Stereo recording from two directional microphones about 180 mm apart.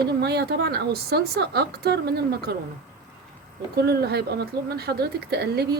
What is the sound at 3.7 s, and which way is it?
Speech, 60° right (ahead or behind).